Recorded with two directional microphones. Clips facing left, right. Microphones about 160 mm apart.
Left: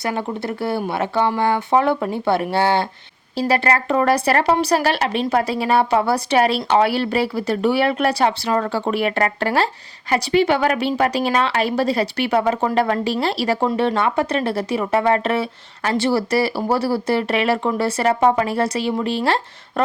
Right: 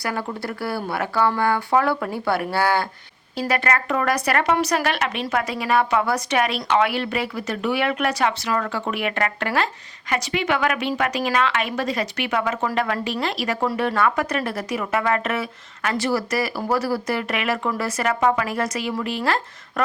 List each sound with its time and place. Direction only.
0.0 s a woman's voice: 20° left (ahead or behind)